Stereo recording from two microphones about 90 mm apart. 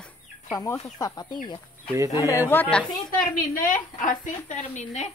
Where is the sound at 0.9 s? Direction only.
45° left (ahead or behind).